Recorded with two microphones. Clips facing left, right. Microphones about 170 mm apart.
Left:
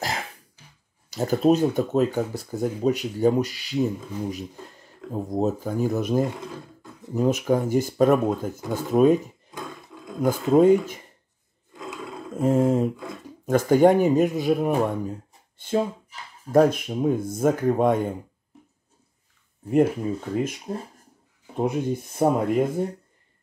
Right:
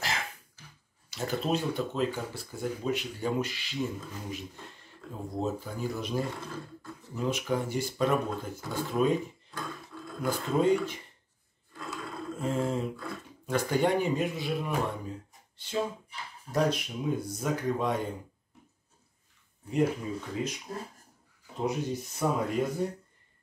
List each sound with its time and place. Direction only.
1.1 s speech: 40° left (ahead or behind)
9.9 s wild animals: 15° left (ahead or behind)
10.2 s speech: 45° left (ahead or behind)
12.4 s speech: 45° left (ahead or behind)
19.7 s speech: 55° left (ahead or behind)
21.5 s speech: 55° left (ahead or behind)